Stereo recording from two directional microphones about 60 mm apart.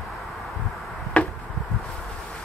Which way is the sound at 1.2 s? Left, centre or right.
Left.